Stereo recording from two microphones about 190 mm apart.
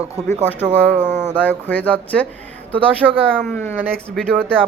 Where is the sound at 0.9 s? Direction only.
40° right (ahead or behind).